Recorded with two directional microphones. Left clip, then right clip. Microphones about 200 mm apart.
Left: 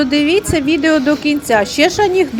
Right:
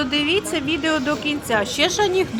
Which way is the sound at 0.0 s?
10° left (ahead or behind).